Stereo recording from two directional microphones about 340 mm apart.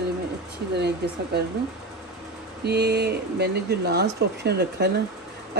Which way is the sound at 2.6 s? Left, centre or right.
Right.